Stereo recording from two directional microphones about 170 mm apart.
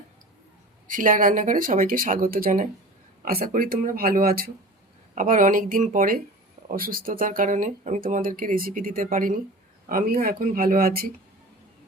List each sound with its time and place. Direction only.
0.9 s speech: 50° right (ahead or behind)